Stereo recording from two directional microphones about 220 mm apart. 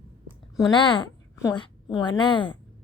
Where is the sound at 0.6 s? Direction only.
20° left (ahead or behind).